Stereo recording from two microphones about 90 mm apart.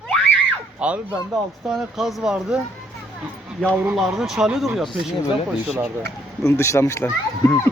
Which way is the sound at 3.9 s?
5° right (ahead or behind).